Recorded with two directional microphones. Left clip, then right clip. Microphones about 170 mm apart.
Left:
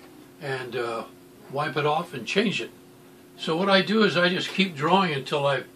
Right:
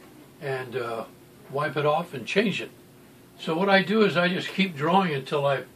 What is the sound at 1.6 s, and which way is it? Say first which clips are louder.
Speech: even; 10° right (ahead or behind).